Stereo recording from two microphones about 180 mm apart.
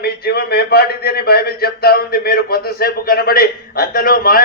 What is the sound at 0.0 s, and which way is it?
A man's voice, 60° left (ahead or behind).